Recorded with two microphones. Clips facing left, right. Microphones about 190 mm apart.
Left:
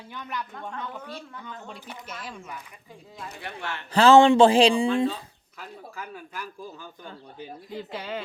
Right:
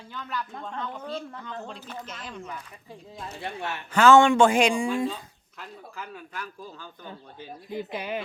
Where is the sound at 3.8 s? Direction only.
35° left (ahead or behind).